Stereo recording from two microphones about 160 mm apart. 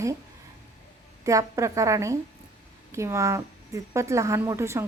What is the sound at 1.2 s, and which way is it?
A woman's voice, 20° right (ahead or behind).